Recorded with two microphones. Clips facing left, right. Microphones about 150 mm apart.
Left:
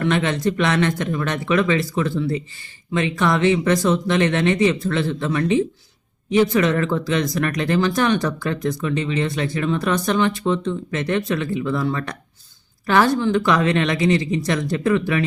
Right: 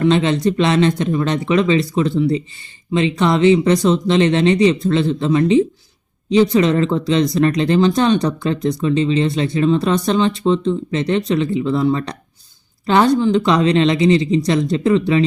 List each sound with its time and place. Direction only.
0.0 s speech: 20° right (ahead or behind)